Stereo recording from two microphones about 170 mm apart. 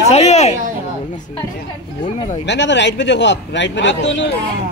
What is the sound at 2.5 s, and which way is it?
A man's voice, 90° left.